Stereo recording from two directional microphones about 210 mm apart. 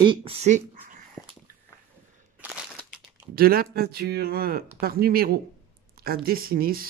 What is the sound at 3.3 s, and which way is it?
Speech, 45° right (ahead or behind).